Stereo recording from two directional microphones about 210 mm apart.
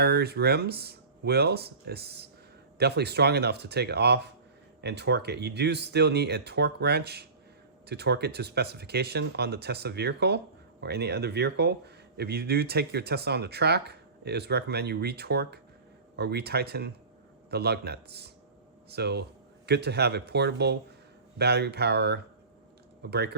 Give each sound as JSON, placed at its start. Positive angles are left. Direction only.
{"t": 0.0, "sound": "speech", "side_deg": -50}